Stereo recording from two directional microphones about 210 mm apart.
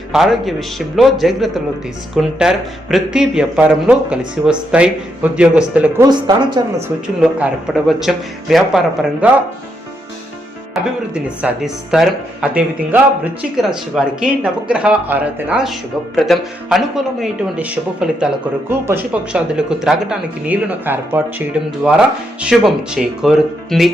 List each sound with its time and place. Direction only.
0.1 s speech: centre (ahead or behind)
6.1 s speech: 20° right (ahead or behind)
6.8 s speech: 5° right (ahead or behind)
10.8 s speech: 5° right (ahead or behind)